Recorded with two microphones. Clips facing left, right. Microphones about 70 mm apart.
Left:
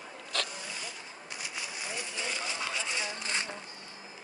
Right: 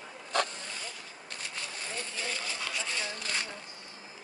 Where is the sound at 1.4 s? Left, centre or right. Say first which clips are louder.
Left 1 dB; centre.